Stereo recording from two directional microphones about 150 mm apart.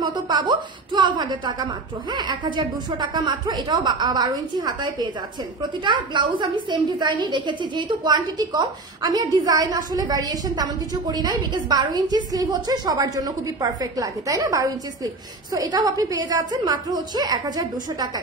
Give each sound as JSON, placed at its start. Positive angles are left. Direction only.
{"t": 0.0, "sound": "a woman's voice", "side_deg": -30}